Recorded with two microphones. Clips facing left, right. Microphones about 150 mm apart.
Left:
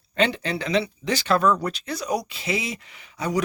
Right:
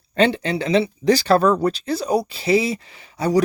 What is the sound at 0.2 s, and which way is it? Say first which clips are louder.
Speech: right 5 dB; 30° right (ahead or behind).